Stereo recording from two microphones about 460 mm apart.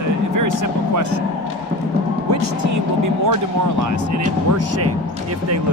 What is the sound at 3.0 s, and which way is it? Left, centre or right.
Speech, right.